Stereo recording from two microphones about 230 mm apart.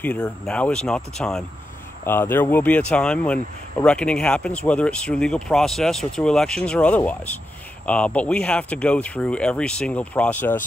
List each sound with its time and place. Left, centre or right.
0.0 s speech: centre